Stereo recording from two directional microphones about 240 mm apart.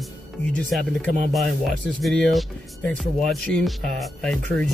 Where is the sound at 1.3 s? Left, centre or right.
Centre.